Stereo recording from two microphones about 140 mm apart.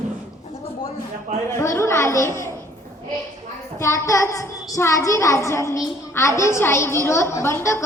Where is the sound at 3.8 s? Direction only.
20° left (ahead or behind).